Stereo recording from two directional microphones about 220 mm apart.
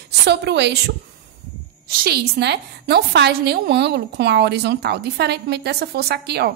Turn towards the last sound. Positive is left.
turn(degrees=-45)  # may be behind; listen again after turning